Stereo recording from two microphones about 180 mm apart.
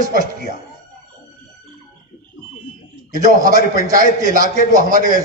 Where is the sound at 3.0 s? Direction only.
45° right (ahead or behind).